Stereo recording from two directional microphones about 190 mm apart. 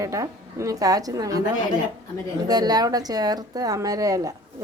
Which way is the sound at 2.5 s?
20° right (ahead or behind).